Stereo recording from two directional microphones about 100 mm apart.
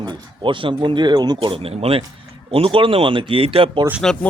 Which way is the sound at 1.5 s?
75° right (ahead or behind).